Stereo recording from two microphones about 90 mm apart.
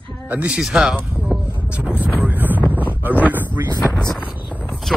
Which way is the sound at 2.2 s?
20° right (ahead or behind).